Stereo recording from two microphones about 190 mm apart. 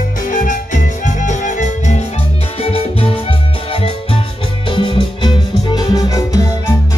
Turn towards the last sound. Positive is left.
turn(degrees=20)  # may be behind; listen again after turning